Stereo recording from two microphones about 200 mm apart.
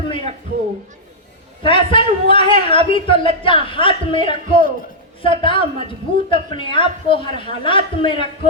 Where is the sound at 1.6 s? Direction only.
25° left (ahead or behind).